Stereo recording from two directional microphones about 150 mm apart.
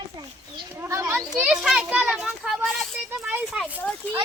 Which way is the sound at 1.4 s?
5° right (ahead or behind).